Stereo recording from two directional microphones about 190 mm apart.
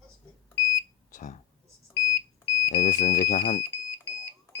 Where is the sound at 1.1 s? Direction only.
45° left (ahead or behind).